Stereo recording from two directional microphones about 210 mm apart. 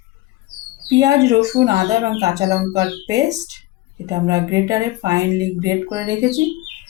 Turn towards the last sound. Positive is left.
turn(degrees=-15)  # may be behind; listen again after turning